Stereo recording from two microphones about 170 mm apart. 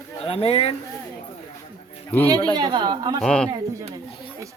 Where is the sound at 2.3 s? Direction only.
25° right (ahead or behind).